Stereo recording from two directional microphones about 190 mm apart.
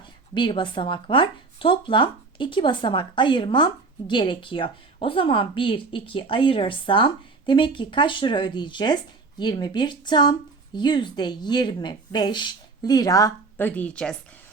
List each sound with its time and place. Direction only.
0.3 s speech: 25° left (ahead or behind); by 14.2 s 5° left (ahead or behind)